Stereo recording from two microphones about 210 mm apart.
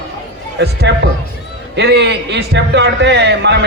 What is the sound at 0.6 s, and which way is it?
A man's voice, 50° right (ahead or behind).